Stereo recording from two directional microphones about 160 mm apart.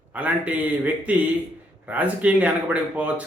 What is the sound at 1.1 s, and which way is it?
Speech, 10° right (ahead or behind).